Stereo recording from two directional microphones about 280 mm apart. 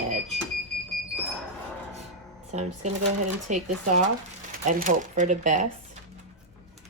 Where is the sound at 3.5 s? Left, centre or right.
Right.